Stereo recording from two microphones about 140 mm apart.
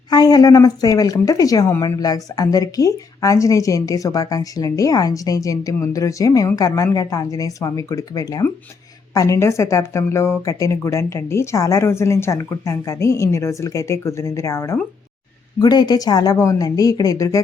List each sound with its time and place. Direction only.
0.1 s speech: 25° left (ahead or behind)